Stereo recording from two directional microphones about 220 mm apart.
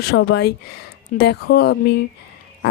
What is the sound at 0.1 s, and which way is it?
A woman's voice, 50° left (ahead or behind).